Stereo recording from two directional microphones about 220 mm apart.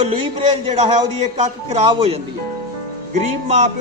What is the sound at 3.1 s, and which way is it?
Speech, 30° right (ahead or behind).